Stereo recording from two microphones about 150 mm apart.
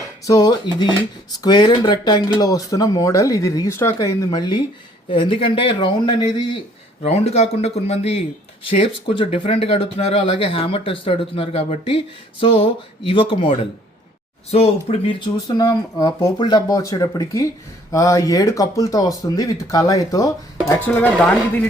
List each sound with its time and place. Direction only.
0.3 s speech: 25° left (ahead or behind)
7.1 s speech: 45° left (ahead or behind); by 21.1 s 15° left (ahead or behind)